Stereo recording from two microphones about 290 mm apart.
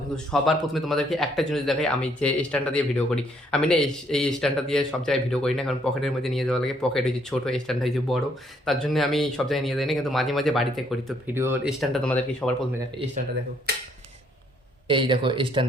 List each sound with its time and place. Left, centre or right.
0.3 s speech: centre
13.0 s speech: centre
13.7 s a sound: right
14.8 s speech: centre